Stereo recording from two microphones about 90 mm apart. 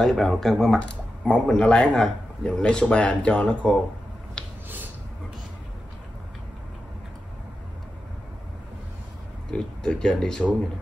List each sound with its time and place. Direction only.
0.0 s speech: 5° left (ahead or behind)
4.4 s a sound: 10° left (ahead or behind)
9.5 s speech: 10° left (ahead or behind)